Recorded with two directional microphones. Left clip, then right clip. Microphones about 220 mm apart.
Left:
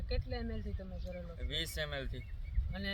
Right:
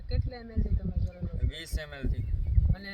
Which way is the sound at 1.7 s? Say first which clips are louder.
Even; centre (ahead or behind).